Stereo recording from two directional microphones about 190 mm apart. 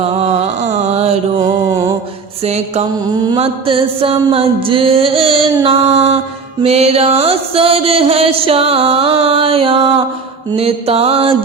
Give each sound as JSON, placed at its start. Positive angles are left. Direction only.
{"t": 0.0, "sound": "a sound", "side_deg": -30}
{"t": 1.4, "sound": "mantra", "side_deg": -20}
{"t": 2.4, "sound": "music", "side_deg": -35}